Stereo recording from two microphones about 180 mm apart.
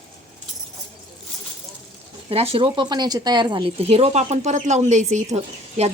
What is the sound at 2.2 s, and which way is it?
Speech, 30° right (ahead or behind).